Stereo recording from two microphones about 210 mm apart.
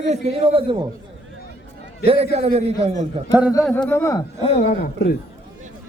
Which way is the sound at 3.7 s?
5° left (ahead or behind).